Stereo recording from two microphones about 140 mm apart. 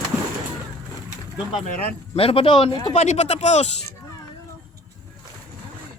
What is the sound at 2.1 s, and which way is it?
Speech, 45° left (ahead or behind).